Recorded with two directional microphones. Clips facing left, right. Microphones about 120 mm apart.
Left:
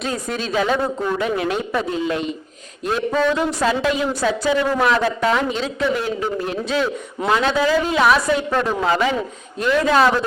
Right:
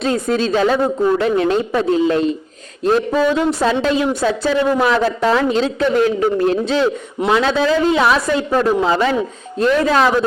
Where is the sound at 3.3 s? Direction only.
25° right (ahead or behind).